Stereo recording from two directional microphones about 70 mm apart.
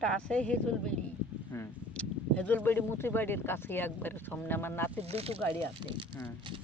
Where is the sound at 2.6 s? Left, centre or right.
Left.